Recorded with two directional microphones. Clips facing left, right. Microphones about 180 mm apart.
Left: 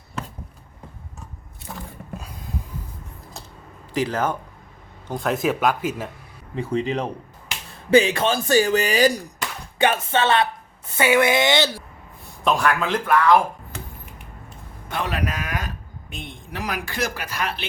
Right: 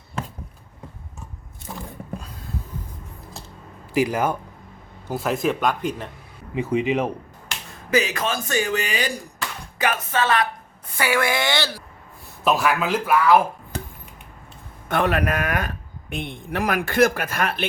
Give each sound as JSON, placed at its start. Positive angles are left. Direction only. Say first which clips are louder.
{"t": 3.9, "sound": "speech", "louder": "right 2 dB", "side_deg": -10}
{"t": 6.5, "sound": "speech", "louder": "right 2 dB", "side_deg": -10}
{"t": 7.9, "sound": "speech", "louder": "left 5 dB", "side_deg": 30}
{"t": 12.5, "sound": "speech", "louder": "even", "side_deg": -5}
{"t": 13.7, "sound": "a sound", "louder": "right 4 dB", "side_deg": -35}
{"t": 14.8, "sound": "a man's voice", "louder": "right 5 dB", "side_deg": -55}